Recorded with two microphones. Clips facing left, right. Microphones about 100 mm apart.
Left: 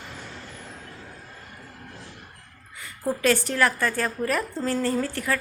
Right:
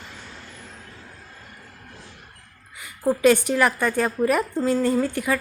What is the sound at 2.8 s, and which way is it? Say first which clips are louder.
A woman's voice: right 6 dB; 15° right (ahead or behind).